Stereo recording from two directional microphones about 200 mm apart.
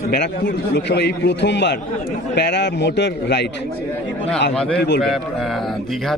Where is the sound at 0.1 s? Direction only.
50° left (ahead or behind).